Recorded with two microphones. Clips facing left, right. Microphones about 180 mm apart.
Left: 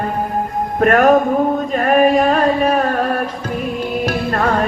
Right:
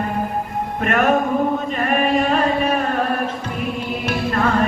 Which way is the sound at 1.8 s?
40° left (ahead or behind).